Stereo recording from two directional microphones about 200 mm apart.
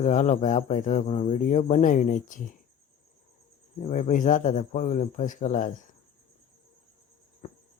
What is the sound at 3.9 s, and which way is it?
Speech, 40° left (ahead or behind).